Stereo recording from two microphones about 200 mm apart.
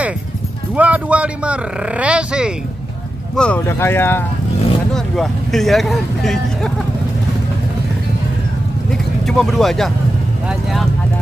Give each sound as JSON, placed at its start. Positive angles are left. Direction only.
{"t": 0.7, "sound": "speech", "side_deg": -5}
{"t": 3.3, "sound": "speech", "side_deg": 5}
{"t": 4.9, "sound": "speech", "side_deg": 0}
{"t": 8.9, "sound": "vehicle", "side_deg": 0}